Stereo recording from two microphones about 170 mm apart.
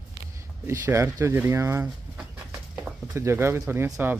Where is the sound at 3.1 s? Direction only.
15° right (ahead or behind).